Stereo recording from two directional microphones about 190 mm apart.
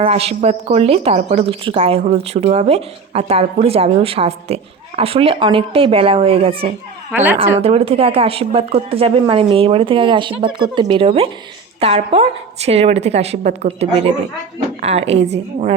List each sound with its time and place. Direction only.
0.0 s speech: 30° right (ahead or behind)
7.1 s speech: 10° right (ahead or behind)
7.6 s speech: 30° right (ahead or behind)